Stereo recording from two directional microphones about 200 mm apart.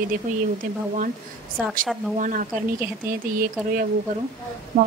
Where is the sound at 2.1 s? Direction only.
40° right (ahead or behind).